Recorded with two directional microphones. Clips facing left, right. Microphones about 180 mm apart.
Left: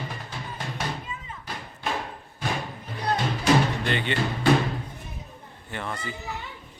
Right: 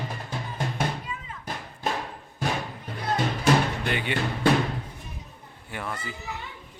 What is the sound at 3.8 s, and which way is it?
Music, 10° right (ahead or behind).